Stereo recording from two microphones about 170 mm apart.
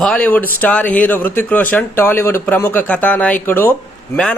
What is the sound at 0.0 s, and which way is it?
Speech, 5° left (ahead or behind).